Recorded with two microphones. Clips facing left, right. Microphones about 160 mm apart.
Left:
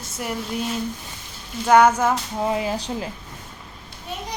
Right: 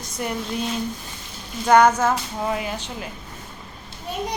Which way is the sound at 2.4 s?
25° left (ahead or behind).